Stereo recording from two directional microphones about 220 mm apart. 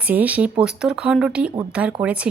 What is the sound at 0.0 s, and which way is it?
A woman's voice, 5° right (ahead or behind).